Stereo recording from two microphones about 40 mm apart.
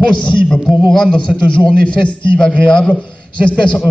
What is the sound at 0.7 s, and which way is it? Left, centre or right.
Speech, centre.